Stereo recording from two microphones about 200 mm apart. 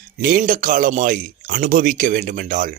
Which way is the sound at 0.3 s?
45° right (ahead or behind).